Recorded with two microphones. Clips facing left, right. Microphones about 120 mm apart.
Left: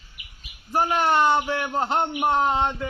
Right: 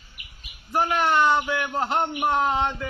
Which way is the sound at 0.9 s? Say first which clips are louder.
Left 1 dB; 30° left (ahead or behind).